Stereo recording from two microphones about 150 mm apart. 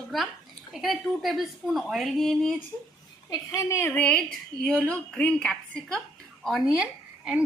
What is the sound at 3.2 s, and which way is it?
A woman's voice, 25° left (ahead or behind).